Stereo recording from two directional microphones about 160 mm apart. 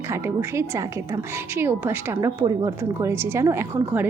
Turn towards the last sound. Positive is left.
turn(degrees=-15)  # may be behind; listen again after turning